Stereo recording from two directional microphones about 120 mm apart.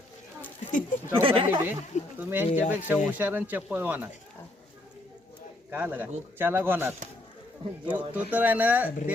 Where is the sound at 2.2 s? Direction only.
15° right (ahead or behind).